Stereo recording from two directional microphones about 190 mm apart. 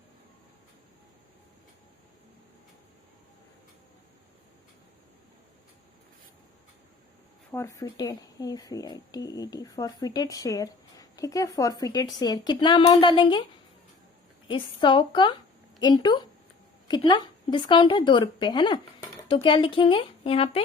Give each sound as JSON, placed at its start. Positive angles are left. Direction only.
{"t": 7.5, "sound": "speech", "side_deg": 15}
{"t": 14.4, "sound": "speech", "side_deg": 25}